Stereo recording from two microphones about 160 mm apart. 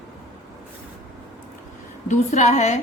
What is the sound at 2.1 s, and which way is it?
Speech, 45° left (ahead or behind).